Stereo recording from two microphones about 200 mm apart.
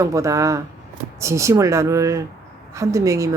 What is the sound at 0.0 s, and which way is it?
Speech, 15° right (ahead or behind).